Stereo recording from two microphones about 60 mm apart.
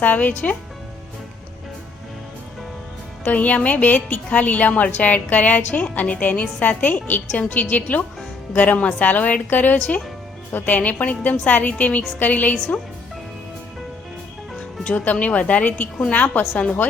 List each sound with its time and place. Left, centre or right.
0.0 s a woman's voice: left
3.2 s a woman's voice: left
9.7 s a woman's voice: centre
12.5 s speech: centre
14.8 s a woman's voice: left